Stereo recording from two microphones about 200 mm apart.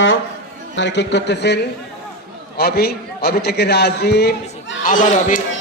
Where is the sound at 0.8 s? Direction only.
60° left (ahead or behind).